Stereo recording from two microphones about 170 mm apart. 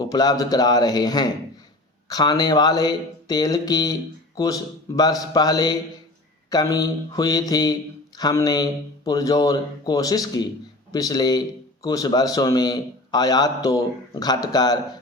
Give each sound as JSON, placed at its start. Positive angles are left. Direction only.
{"t": 0.0, "sound": "speech", "side_deg": 20}